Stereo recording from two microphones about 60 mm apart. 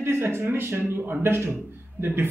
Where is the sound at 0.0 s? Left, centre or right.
Right.